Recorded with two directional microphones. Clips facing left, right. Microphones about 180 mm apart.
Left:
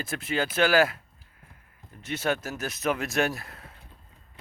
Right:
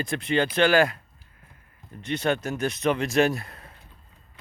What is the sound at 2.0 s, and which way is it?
Speech, 5° left (ahead or behind).